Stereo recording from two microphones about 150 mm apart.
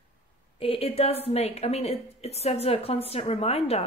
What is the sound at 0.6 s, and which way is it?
A woman's voice, 40° left (ahead or behind).